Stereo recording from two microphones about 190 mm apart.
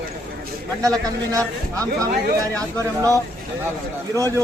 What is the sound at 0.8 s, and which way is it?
A man's voice, 20° right (ahead or behind).